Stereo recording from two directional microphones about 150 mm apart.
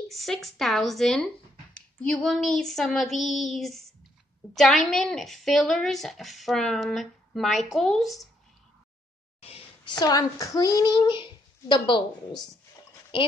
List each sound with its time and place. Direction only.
0.1 s speech: centre (ahead or behind)
9.4 s a sound: 40° left (ahead or behind)
9.9 s a child's voice: 25° left (ahead or behind)